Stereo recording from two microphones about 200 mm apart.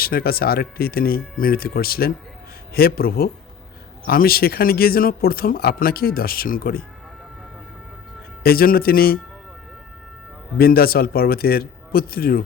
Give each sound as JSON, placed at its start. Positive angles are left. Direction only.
{"t": 0.0, "sound": "speech", "side_deg": 50}
{"t": 8.4, "sound": "speech", "side_deg": 50}
{"t": 10.6, "sound": "speech", "side_deg": 50}